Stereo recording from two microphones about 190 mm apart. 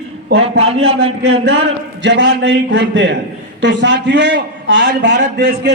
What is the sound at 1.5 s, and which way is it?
A man's voice, 65° right (ahead or behind).